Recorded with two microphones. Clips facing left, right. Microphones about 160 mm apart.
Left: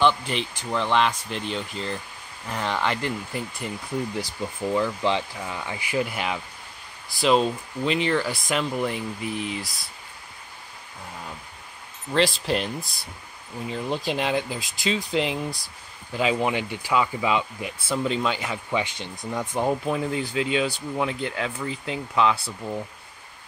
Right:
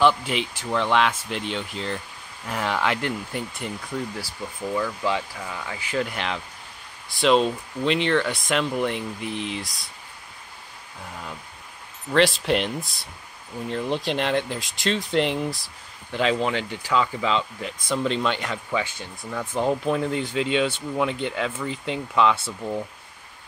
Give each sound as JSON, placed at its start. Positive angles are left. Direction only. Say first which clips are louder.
{"t": 0.0, "sound": "speech", "louder": "right 2 dB", "side_deg": 0}
{"t": 4.7, "sound": "speech", "louder": "left 1 dB", "side_deg": 20}
{"t": 12.2, "sound": "speech", "louder": "right 3 dB", "side_deg": 0}
{"t": 18.7, "sound": "speech", "louder": "left 1 dB", "side_deg": 20}
{"t": 19.8, "sound": "speech", "louder": "right 2 dB", "side_deg": 5}